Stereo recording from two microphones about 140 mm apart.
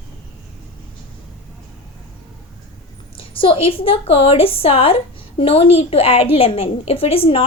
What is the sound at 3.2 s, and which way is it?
A woman's voice, 40° left (ahead or behind).